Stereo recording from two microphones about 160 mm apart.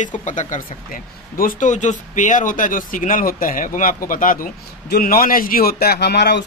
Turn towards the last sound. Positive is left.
turn(degrees=90)